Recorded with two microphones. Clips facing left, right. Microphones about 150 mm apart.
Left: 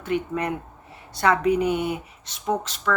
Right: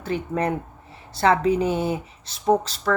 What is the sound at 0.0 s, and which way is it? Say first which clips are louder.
Speech: right 1 dB; 35° right (ahead or behind).